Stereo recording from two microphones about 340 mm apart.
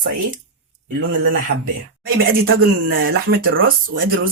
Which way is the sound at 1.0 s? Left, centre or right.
Right.